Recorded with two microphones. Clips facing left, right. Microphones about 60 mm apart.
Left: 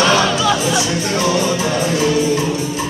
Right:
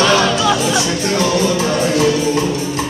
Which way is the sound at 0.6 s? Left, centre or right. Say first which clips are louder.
Right 1 dB; centre.